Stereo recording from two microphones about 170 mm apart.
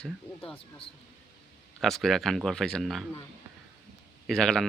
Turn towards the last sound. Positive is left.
turn(degrees=5)  # may be behind; listen again after turning